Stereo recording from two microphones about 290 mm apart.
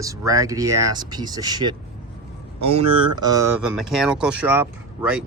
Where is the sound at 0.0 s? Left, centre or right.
Centre.